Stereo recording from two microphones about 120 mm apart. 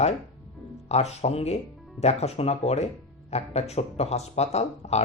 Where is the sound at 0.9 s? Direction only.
65° left (ahead or behind).